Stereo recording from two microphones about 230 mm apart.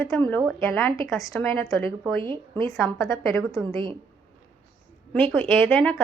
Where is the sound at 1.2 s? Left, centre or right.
Centre.